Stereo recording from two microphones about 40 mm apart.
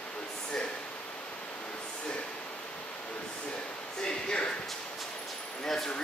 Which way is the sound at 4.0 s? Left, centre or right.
Left.